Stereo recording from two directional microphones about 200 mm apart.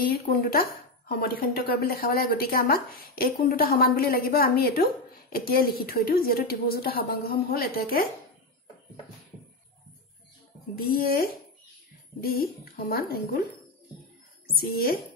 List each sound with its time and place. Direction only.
0.3 s a woman's voice: 50° left (ahead or behind)
10.8 s a woman's voice: 50° left (ahead or behind)
14.7 s a woman's voice: 50° left (ahead or behind)